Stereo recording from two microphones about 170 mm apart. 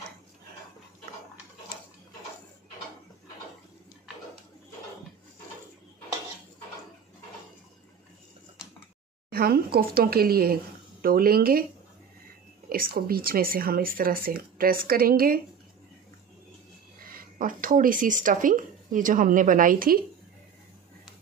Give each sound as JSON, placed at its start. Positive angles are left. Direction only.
{"t": 9.3, "sound": "speech", "side_deg": -65}
{"t": 12.6, "sound": "speech", "side_deg": -60}
{"t": 17.4, "sound": "a woman's voice", "side_deg": -50}